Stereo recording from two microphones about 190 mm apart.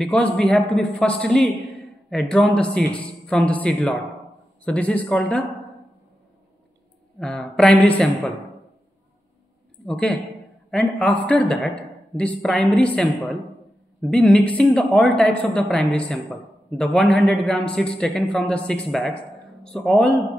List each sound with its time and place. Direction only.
0.0 s speech: 5° left (ahead or behind)
7.2 s speech: 5° left (ahead or behind)
9.8 s speech: 5° left (ahead or behind)